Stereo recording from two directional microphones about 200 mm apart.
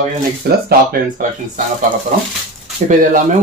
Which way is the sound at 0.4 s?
50° right (ahead or behind).